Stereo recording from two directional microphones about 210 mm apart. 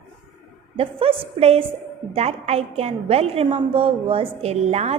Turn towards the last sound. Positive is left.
turn(degrees=-30)  # may be behind; listen again after turning